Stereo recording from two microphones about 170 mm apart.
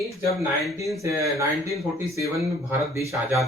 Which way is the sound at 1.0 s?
20° right (ahead or behind).